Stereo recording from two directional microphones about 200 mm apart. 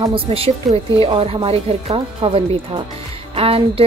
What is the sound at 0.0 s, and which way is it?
A woman's voice, 25° right (ahead or behind).